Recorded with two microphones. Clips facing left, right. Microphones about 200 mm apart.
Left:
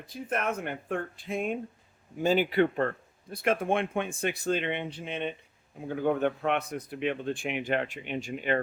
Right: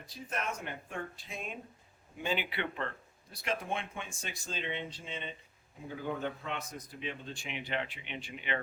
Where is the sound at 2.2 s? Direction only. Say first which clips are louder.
Left 11 dB; 40° left (ahead or behind).